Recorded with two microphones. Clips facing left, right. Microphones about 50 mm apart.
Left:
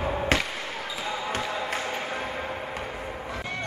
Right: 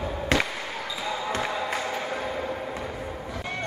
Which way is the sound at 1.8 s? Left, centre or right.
Left.